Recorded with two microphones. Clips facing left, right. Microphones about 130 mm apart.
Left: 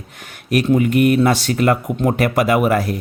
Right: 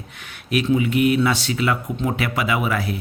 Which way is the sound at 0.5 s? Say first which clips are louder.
Left 4 dB; 50° left (ahead or behind).